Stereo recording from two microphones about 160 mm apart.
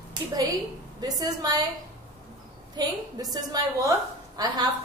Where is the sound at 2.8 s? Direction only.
25° right (ahead or behind).